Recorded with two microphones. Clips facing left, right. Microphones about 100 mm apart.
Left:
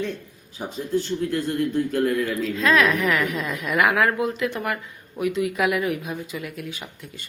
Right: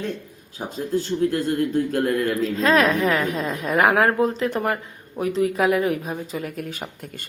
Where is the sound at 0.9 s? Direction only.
40° right (ahead or behind).